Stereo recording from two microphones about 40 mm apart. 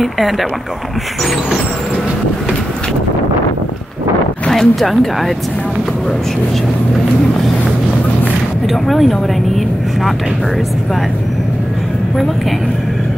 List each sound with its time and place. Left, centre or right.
0.0 s speech: centre
4.5 s speech: centre
8.6 s speech: centre